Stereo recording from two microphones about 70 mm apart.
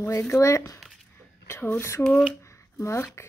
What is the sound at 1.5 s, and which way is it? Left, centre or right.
Speech, left.